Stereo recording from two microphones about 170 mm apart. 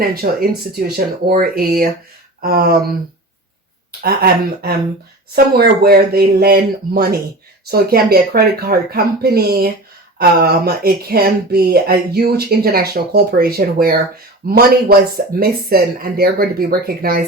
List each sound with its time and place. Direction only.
0.0 s speech: 60° right (ahead or behind)
4.0 s speech: 65° right (ahead or behind)